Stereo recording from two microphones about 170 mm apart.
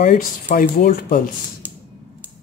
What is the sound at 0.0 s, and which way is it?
Speech, 60° left (ahead or behind).